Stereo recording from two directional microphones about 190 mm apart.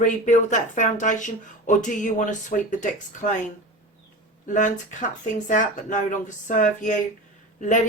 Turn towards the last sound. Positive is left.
turn(degrees=40)  # may be behind; listen again after turning